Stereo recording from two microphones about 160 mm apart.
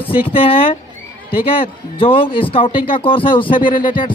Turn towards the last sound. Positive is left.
turn(degrees=30)  # may be behind; listen again after turning